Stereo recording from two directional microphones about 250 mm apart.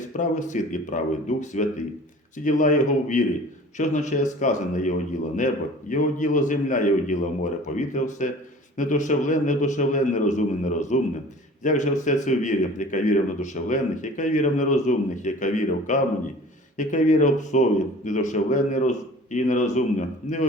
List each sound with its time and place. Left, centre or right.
0.1 s a man's voice: left